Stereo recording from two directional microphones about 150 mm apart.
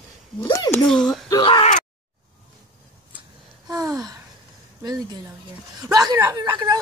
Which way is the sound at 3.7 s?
25° right (ahead or behind).